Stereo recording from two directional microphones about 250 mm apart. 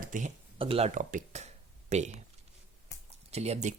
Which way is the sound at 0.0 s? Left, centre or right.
Right.